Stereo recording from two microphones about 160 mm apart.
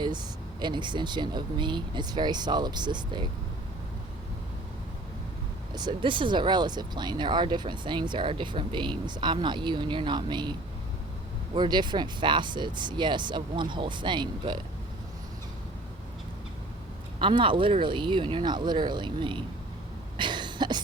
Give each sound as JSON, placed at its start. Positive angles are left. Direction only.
{"t": 0.6, "sound": "speech", "side_deg": -30}
{"t": 5.7, "sound": "speech", "side_deg": -30}
{"t": 11.5, "sound": "speech", "side_deg": -30}
{"t": 17.2, "sound": "speech", "side_deg": -30}
{"t": 20.1, "sound": "cough", "side_deg": -30}